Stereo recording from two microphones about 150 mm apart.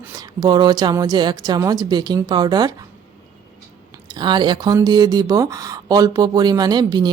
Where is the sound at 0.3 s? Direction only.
30° right (ahead or behind).